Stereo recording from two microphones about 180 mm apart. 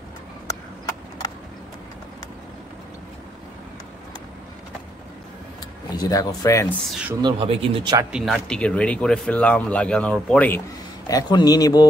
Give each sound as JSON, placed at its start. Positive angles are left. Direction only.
{"t": 5.9, "sound": "speech", "side_deg": 20}
{"t": 6.9, "sound": "speech", "side_deg": -5}
{"t": 7.2, "sound": "speech", "side_deg": -25}
{"t": 8.1, "sound": "speech", "side_deg": 0}
{"t": 11.1, "sound": "speech", "side_deg": 20}